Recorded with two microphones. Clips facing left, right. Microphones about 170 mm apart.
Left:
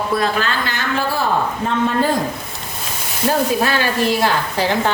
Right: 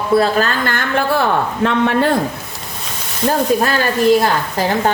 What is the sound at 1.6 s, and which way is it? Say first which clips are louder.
Speech: right 4 dB; 70° right (ahead or behind).